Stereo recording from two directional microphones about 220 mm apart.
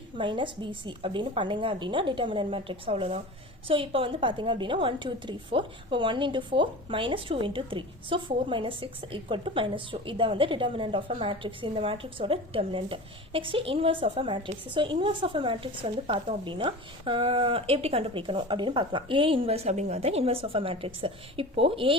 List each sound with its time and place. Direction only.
0.2 s a woman's voice: 20° right (ahead or behind)